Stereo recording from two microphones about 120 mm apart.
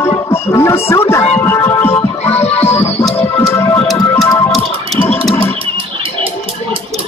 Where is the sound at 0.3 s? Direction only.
20° left (ahead or behind).